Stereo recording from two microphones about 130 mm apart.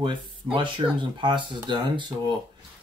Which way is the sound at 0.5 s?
35° right (ahead or behind).